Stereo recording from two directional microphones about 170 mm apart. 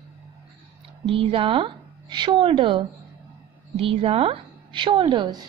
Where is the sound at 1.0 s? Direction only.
35° right (ahead or behind).